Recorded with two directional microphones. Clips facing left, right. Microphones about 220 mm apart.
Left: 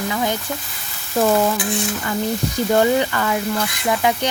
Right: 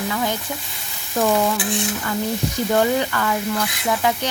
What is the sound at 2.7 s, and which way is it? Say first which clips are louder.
Speech: left 3 dB; 15° left (ahead or behind).